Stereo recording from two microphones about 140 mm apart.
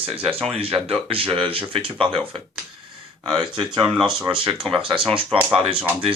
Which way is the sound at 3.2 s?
30° right (ahead or behind).